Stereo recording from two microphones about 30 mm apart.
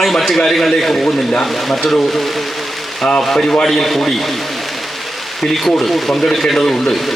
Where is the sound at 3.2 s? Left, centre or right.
Centre.